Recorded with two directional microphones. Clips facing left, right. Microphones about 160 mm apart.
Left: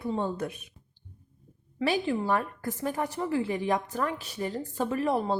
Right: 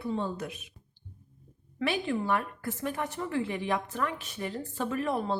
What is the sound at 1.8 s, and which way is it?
A woman's voice, 35° left (ahead or behind).